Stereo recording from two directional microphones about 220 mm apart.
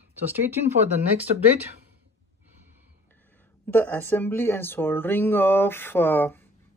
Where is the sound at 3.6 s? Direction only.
10° left (ahead or behind).